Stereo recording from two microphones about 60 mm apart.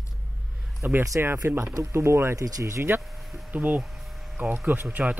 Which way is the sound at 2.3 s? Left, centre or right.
Right.